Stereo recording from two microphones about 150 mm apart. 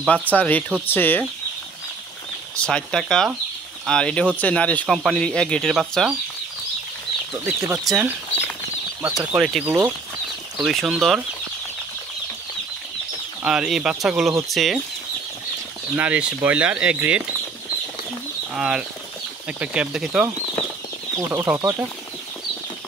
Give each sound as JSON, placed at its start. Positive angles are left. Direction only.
{"t": 0.0, "sound": "speech", "side_deg": 10}
{"t": 2.5, "sound": "speech", "side_deg": 5}
{"t": 7.3, "sound": "speech", "side_deg": -20}
{"t": 9.0, "sound": "speech", "side_deg": -10}
{"t": 10.6, "sound": "speech", "side_deg": 0}
{"t": 13.4, "sound": "speech", "side_deg": -5}
{"t": 16.0, "sound": "speech", "side_deg": -10}
{"t": 18.5, "sound": "speech", "side_deg": -5}
{"t": 21.3, "sound": "speech", "side_deg": -15}